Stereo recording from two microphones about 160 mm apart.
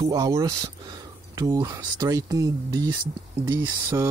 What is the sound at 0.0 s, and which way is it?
Speech, 20° right (ahead or behind).